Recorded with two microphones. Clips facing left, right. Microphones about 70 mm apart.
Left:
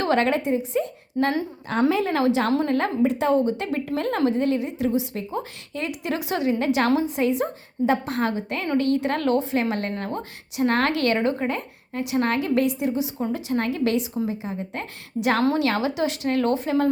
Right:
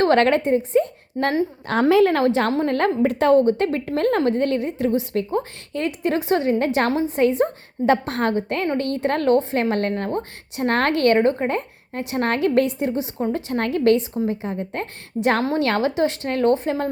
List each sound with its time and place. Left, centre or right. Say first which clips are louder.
0.0 s a woman's voice: right 5 dB; right
1.6 s a woman's voice: right 6 dB; right
2.2 s a woman's voice: right 2 dB; right
7.2 s a woman's voice: right 4 dB; right
7.9 s a woman's voice: right 4 dB; right
9.9 s a woman's voice: right 4 dB; right
10.6 s a woman's voice: right 2 dB; right